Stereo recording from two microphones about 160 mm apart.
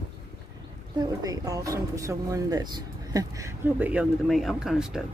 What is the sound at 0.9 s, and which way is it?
Speech, 20° right (ahead or behind).